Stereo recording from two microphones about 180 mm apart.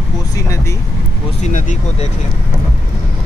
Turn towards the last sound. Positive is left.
turn(degrees=45)  # may be behind; listen again after turning